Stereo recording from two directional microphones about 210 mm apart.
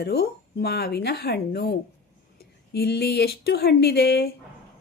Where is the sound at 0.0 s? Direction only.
50° left (ahead or behind).